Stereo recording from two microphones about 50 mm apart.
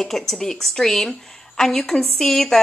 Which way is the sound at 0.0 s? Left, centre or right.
Centre.